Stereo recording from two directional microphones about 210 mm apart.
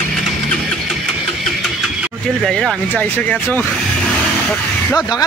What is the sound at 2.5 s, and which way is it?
Speech, 5° left (ahead or behind).